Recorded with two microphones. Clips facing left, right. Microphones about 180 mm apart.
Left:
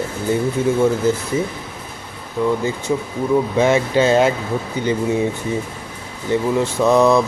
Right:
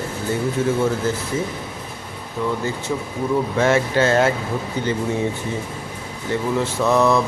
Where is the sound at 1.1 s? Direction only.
15° left (ahead or behind).